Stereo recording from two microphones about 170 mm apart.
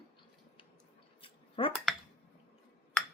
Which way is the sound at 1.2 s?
30° left (ahead or behind).